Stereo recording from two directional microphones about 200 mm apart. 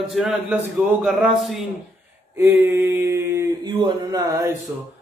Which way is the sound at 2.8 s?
15° right (ahead or behind).